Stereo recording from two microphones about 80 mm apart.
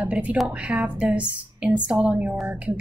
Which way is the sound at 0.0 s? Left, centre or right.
Centre.